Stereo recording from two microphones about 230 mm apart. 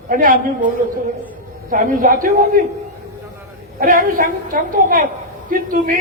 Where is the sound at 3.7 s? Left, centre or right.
Right.